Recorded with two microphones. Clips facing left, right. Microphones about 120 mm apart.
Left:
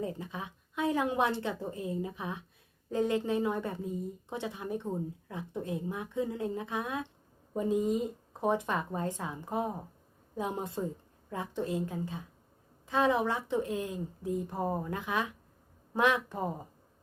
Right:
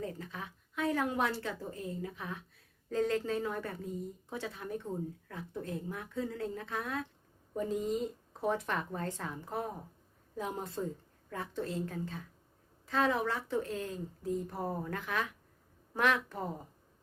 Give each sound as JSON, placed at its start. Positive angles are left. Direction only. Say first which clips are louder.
{"t": 0.0, "sound": "a woman's voice", "louder": "left 4 dB", "side_deg": 20}